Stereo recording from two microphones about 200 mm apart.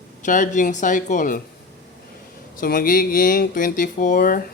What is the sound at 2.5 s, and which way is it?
Speech, 45° left (ahead or behind).